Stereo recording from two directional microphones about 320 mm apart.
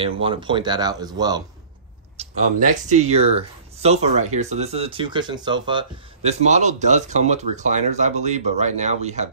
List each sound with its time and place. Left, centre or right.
0.0 s speech: centre
2.1 s speech: right